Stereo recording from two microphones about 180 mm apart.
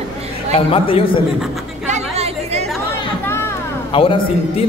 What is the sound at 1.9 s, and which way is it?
Chatter, 35° right (ahead or behind).